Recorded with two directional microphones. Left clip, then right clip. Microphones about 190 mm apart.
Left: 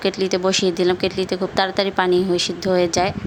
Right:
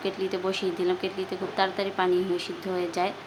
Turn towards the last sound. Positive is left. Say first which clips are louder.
# left 10 dB
turn(degrees=35)  # may be behind; listen again after turning